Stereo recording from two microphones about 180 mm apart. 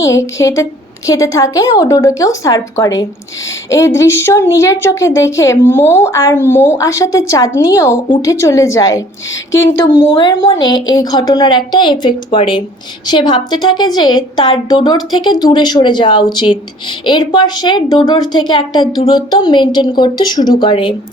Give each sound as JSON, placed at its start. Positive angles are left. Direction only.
{"t": 0.0, "sound": "a woman's voice", "side_deg": 15}
{"t": 10.2, "sound": "a woman's voice", "side_deg": 20}